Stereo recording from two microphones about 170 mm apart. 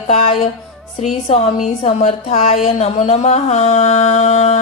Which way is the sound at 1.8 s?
40° left (ahead or behind).